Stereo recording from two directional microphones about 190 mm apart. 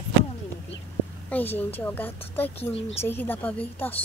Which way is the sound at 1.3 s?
10° left (ahead or behind).